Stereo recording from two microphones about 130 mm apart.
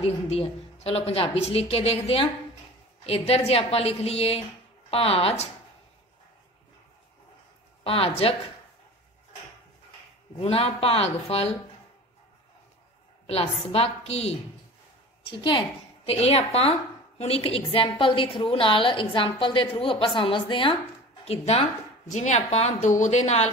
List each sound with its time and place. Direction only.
0.0 s a woman's voice: 50° left (ahead or behind)
7.8 s a woman's voice: 50° left (ahead or behind)
10.4 s a woman's voice: 50° left (ahead or behind)
13.3 s a woman's voice: 50° left (ahead or behind)
16.1 s a woman's voice: 50° left (ahead or behind)
21.3 s a woman's voice: 55° left (ahead or behind)
22.1 s a woman's voice: 65° left (ahead or behind)